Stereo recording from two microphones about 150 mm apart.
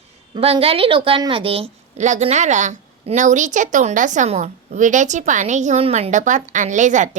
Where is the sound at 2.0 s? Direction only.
50° right (ahead or behind).